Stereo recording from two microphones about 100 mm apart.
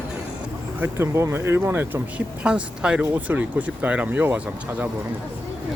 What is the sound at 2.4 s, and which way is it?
Speech, 10° right (ahead or behind).